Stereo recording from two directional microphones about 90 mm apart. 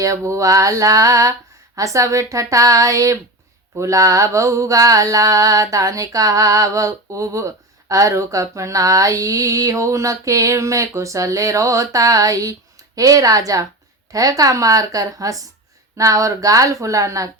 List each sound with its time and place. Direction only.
0.0 s mantra: 40° right (ahead or behind)